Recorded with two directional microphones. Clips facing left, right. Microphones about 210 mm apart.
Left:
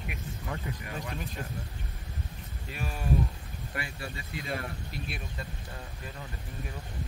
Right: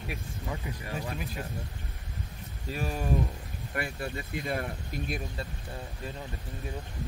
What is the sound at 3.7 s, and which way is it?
Speech, 55° right (ahead or behind).